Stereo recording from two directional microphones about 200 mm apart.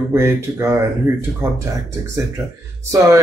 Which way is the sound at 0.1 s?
15° right (ahead or behind).